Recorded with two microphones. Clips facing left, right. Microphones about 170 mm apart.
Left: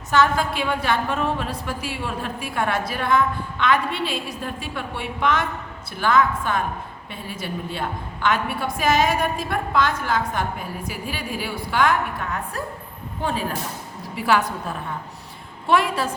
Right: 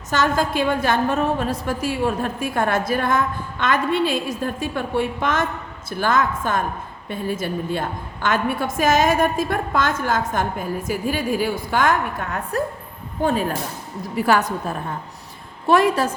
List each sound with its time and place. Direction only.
0.1 s a woman's voice: 45° right (ahead or behind)
14.2 s a woman's voice: 45° right (ahead or behind)